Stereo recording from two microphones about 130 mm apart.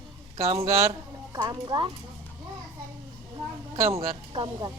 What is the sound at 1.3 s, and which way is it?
Speech, 30° right (ahead or behind).